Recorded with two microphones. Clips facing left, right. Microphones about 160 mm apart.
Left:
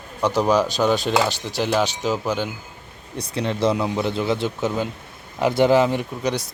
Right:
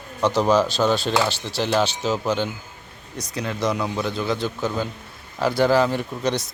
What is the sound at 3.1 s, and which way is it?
A man's voice, 30° left (ahead or behind).